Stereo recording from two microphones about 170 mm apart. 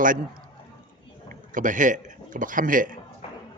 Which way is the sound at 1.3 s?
50° right (ahead or behind).